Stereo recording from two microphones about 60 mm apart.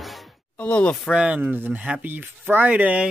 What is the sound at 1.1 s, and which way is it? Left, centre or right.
Speech, centre.